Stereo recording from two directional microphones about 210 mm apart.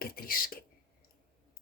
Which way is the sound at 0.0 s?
45° left (ahead or behind).